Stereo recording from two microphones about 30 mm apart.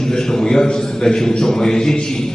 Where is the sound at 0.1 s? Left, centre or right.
Centre.